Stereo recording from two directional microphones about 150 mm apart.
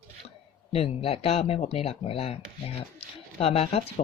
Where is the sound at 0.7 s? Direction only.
40° left (ahead or behind).